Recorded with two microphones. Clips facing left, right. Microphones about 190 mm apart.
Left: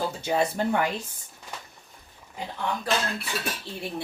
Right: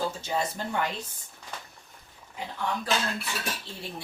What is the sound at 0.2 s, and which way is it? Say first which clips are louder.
Speech: left 6 dB; 60° left (ahead or behind).